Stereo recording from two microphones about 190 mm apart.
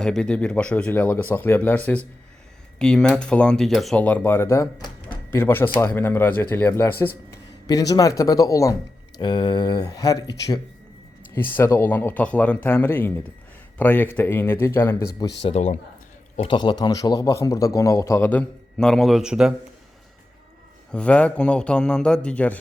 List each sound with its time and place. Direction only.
0.0 s a man's voice: 5° left (ahead or behind); by 10.2 s 20° left (ahead or behind)
11.5 s speech: 10° left (ahead or behind)
15.4 s a man's voice: 35° left (ahead or behind); by 19.5 s 5° right (ahead or behind)
20.9 s a man's voice: 5° left (ahead or behind)